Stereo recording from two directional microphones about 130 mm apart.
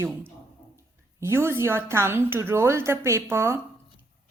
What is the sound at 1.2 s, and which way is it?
A woman's voice, 20° right (ahead or behind).